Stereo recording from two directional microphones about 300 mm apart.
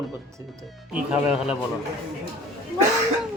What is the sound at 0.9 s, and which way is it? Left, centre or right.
Speech, centre.